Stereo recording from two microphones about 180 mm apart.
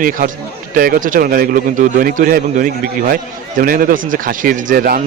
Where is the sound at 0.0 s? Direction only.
50° right (ahead or behind).